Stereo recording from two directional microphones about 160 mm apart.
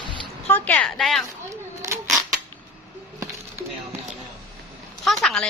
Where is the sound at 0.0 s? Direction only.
30° right (ahead or behind).